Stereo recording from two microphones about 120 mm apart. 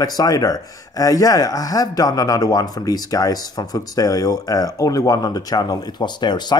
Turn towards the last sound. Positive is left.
turn(degrees=35)  # may be behind; listen again after turning